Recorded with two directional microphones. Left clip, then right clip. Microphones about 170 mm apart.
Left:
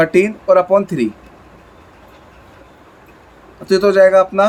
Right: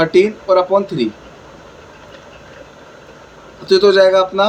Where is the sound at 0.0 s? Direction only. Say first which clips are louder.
Right 1 dB; 45° left (ahead or behind).